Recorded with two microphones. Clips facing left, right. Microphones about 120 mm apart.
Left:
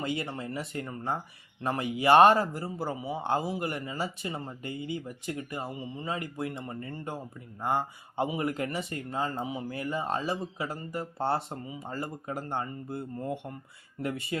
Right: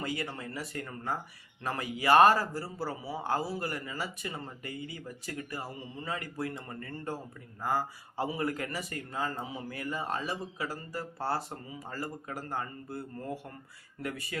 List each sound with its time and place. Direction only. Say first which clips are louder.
0.0 s speech: left 3 dB; 25° left (ahead or behind)